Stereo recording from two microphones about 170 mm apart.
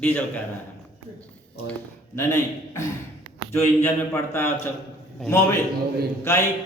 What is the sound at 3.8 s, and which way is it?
Speech, 15° left (ahead or behind).